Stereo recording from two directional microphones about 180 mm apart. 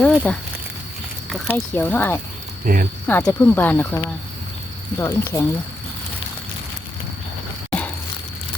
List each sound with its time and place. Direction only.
0.0 s speech: 5° left (ahead or behind)
1.5 s speech: 10° left (ahead or behind)
2.7 s speech: 50° right (ahead or behind)
3.1 s speech: 10° left (ahead or behind)